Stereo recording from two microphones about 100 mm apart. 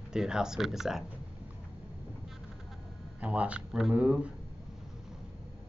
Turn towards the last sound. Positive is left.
turn(degrees=-10)  # may be behind; listen again after turning